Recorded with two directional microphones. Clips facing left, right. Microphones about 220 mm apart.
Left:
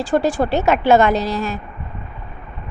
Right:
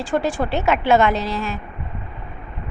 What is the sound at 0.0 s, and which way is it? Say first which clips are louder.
A woman's voice: left 4 dB; 35° left (ahead or behind).